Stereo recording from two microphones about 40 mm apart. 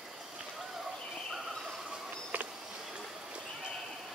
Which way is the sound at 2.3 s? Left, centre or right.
Right.